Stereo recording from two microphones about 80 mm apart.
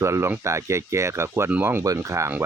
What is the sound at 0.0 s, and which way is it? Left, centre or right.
Speech, right.